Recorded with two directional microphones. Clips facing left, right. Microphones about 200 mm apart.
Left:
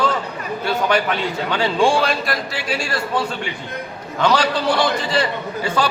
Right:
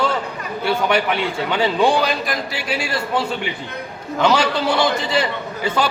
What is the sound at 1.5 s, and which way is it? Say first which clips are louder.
Speech: even; 5° right (ahead or behind).